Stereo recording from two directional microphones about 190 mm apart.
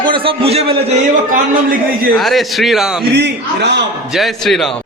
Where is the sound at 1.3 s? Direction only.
50° right (ahead or behind).